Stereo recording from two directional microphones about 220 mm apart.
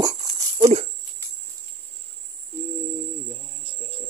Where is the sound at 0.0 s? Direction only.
15° right (ahead or behind).